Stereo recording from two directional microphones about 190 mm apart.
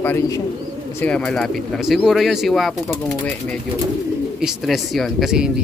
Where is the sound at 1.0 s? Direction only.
5° left (ahead or behind).